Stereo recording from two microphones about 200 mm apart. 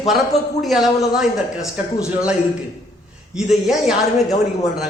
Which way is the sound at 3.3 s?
Centre (ahead or behind).